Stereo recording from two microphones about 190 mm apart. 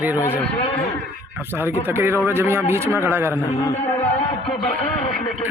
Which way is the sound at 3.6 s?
15° left (ahead or behind).